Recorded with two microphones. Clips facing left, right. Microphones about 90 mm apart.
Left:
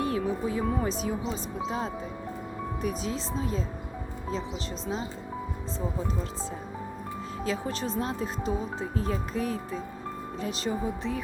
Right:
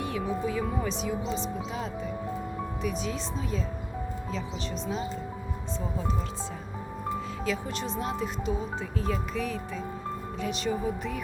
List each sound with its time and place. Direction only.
0.0 s speech: 35° left (ahead or behind)
7.4 s speech: 35° left (ahead or behind)